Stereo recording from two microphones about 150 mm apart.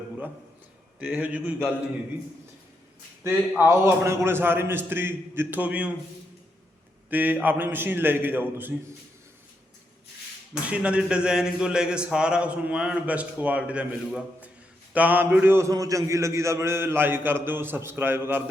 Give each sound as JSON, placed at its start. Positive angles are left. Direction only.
{"t": 0.9, "sound": "speech", "side_deg": -10}
{"t": 3.6, "sound": "speech", "side_deg": -15}
{"t": 7.1, "sound": "speech", "side_deg": -10}
{"t": 10.5, "sound": "speech", "side_deg": -10}